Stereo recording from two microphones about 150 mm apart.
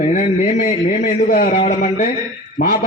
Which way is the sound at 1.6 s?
70° left (ahead or behind).